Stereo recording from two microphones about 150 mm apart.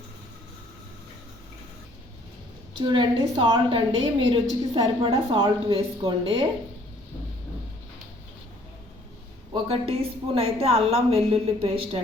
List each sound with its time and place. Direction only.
2.7 s a woman's voice: 30° right (ahead or behind)
9.5 s a woman's voice: 40° right (ahead or behind)